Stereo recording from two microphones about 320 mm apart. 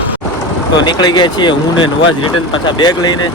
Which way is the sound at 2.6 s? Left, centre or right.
Centre.